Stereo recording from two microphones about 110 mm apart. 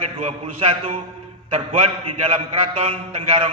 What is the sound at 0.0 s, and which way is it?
Speech, 65° right (ahead or behind).